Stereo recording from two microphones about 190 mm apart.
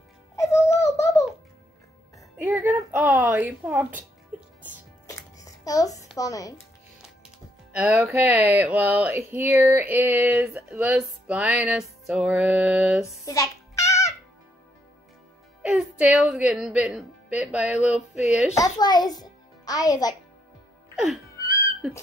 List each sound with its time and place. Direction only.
0.7 s a sound: 15° left (ahead or behind)
2.3 s music: 10° right (ahead or behind)
3.6 s speech: 10° right (ahead or behind)
4.3 s music: 10° right (ahead or behind)
5.0 s music: 15° left (ahead or behind)
7.7 s speech: 5° right (ahead or behind)
13.2 s music: 20° left (ahead or behind)
15.6 s a woman's voice: 5° right (ahead or behind)
18.6 s a child's voice: 20° left (ahead or behind)
19.2 s music: 20° left (ahead or behind)
20.9 s music: centre (ahead or behind)